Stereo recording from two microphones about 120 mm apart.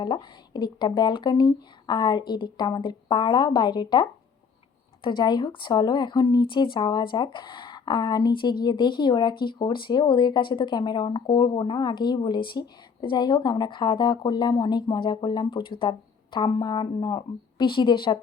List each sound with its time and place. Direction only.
0.0 s speech: 40° left (ahead or behind)
5.0 s speech: 40° left (ahead or behind)